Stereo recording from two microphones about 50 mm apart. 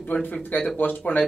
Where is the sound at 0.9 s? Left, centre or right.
Left.